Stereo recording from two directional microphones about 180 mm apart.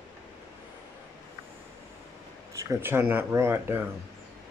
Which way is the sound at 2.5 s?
15° right (ahead or behind).